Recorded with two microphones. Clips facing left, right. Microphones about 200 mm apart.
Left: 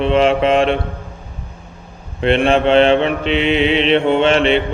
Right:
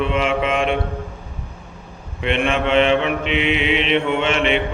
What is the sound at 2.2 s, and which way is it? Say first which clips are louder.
Mantra: left 6 dB; 35° left (ahead or behind).